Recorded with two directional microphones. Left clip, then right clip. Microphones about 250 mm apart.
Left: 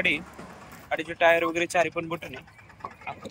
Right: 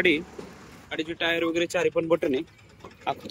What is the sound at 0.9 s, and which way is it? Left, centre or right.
Speech, centre.